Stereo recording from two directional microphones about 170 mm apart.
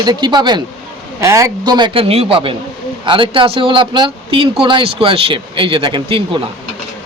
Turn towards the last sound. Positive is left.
turn(degrees=-30)  # may be behind; listen again after turning